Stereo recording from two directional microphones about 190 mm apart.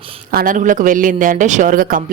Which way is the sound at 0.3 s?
50° right (ahead or behind).